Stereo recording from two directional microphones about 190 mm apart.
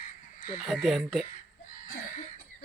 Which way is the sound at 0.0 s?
50° left (ahead or behind).